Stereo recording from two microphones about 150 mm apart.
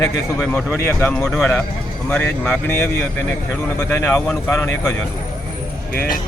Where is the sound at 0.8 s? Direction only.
15° left (ahead or behind).